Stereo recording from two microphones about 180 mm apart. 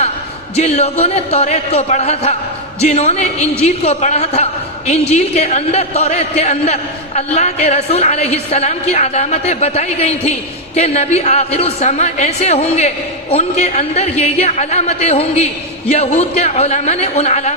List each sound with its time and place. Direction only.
0.5 s a woman's voice: 35° left (ahead or behind)